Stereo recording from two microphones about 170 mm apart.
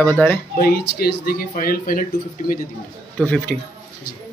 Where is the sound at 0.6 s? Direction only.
60° left (ahead or behind).